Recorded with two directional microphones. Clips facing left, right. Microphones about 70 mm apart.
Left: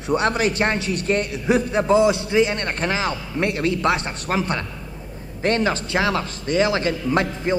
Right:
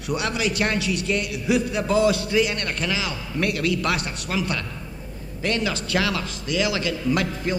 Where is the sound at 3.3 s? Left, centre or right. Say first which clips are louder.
Even; left.